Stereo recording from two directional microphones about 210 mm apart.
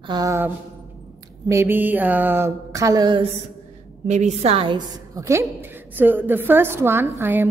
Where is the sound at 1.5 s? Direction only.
10° right (ahead or behind).